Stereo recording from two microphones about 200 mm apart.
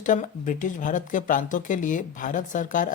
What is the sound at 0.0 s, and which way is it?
Speech, 40° left (ahead or behind).